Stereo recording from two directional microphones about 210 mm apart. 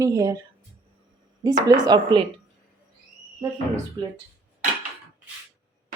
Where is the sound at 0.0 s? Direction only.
15° right (ahead or behind).